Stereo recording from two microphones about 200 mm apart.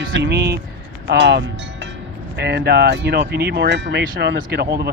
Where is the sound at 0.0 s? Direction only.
65° right (ahead or behind).